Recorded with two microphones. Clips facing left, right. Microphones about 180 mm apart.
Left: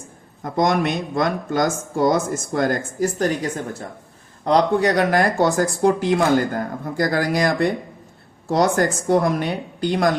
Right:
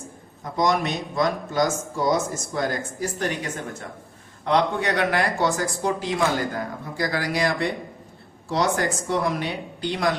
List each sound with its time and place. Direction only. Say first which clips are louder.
0.5 s speech: left 3 dB; 55° left (ahead or behind)